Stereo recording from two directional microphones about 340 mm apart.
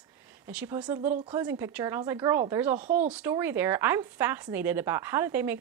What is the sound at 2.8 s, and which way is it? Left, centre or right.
Speech, right.